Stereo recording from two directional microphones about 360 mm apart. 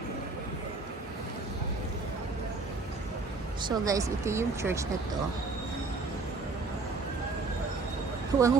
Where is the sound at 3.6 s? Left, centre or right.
Centre.